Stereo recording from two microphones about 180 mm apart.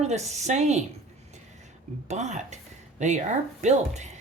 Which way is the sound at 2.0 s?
40° right (ahead or behind).